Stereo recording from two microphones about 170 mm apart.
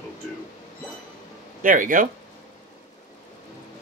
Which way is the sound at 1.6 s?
50° right (ahead or behind).